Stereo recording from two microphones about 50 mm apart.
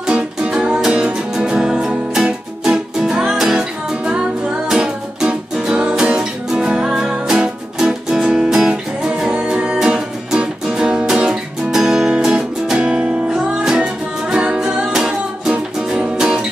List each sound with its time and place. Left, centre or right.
0.0 s music: centre
14.9 s music: centre